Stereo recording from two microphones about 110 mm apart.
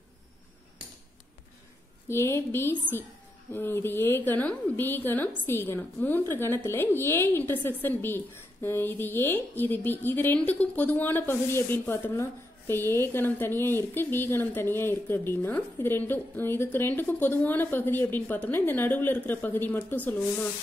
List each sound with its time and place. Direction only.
2.0 s speech: 25° left (ahead or behind)